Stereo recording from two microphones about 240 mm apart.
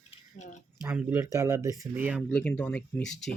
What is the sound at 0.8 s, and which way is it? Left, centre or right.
Speech, centre.